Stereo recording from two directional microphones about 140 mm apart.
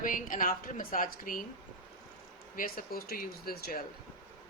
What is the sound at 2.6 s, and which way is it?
Speech, 90° left.